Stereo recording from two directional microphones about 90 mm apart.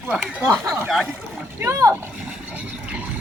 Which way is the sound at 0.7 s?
Centre (ahead or behind).